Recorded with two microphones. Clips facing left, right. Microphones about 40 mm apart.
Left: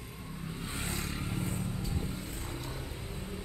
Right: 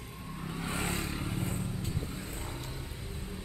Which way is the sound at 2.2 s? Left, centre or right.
Right.